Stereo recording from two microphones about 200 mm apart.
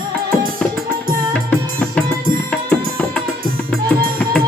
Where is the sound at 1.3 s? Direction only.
5° left (ahead or behind).